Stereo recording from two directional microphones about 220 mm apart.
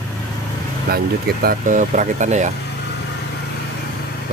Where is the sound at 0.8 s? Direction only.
45° right (ahead or behind).